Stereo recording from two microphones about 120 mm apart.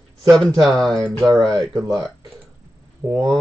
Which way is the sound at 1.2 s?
30° right (ahead or behind).